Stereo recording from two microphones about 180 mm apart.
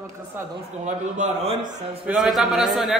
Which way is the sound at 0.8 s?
45° right (ahead or behind).